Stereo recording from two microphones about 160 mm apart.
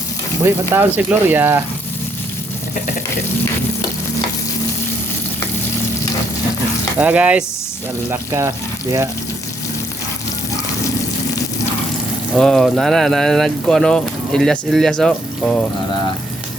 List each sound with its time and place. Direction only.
0.7 s speech: 15° right (ahead or behind)
7.0 s speech: 10° right (ahead or behind)
12.4 s speech: centre (ahead or behind)